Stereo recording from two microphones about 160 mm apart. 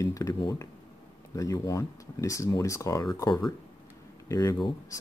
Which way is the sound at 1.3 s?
20° left (ahead or behind).